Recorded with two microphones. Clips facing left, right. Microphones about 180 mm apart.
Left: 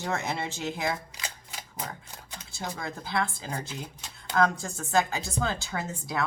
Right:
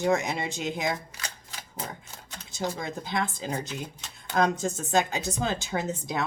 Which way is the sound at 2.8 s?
20° right (ahead or behind).